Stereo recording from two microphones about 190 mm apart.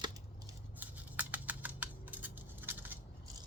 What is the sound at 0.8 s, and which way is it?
Typing, 10° right (ahead or behind).